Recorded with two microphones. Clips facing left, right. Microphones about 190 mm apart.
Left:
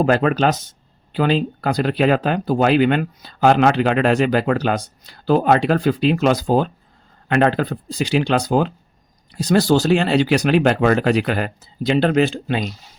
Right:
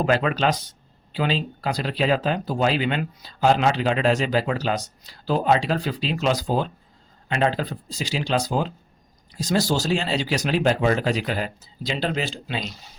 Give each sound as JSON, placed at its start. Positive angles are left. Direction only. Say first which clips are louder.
{"t": 0.0, "sound": "speech", "louder": "left 5 dB", "side_deg": 45}